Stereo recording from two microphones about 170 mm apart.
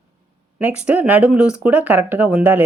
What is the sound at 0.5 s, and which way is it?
Speech, 5° right (ahead or behind).